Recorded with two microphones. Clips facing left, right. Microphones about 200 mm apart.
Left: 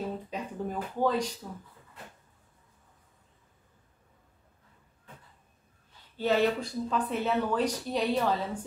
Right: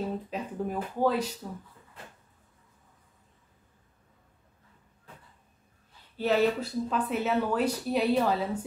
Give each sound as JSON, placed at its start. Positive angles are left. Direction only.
{"t": 0.3, "sound": "speech", "side_deg": -5}
{"t": 6.1, "sound": "speech", "side_deg": -5}